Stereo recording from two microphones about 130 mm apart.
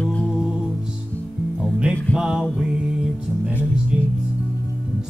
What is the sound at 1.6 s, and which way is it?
Music, 5° right (ahead or behind).